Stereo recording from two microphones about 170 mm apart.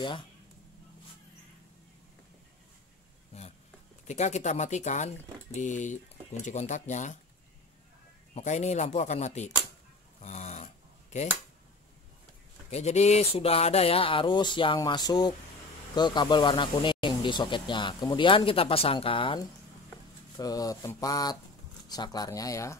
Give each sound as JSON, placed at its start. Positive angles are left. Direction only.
{"t": 0.0, "sound": "speech", "side_deg": 30}
{"t": 4.1, "sound": "speech", "side_deg": 45}
{"t": 8.4, "sound": "speech", "side_deg": 40}
{"t": 10.2, "sound": "a sound", "side_deg": 40}
{"t": 12.7, "sound": "speech", "side_deg": 40}